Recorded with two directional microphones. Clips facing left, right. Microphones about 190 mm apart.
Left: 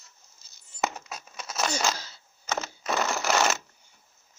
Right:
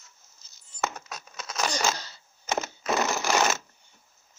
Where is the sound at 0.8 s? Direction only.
10° left (ahead or behind).